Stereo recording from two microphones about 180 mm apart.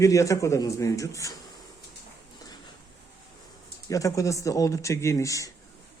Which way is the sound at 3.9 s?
20° left (ahead or behind).